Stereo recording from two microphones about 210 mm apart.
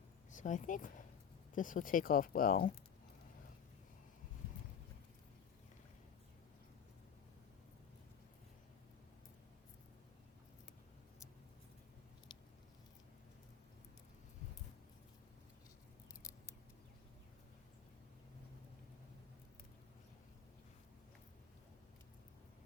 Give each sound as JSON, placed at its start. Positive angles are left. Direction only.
{"t": 0.3, "sound": "speech", "side_deg": 35}
{"t": 12.3, "sound": "patter", "side_deg": 20}